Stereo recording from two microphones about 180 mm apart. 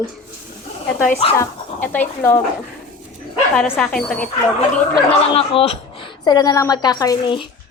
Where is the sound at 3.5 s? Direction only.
5° left (ahead or behind).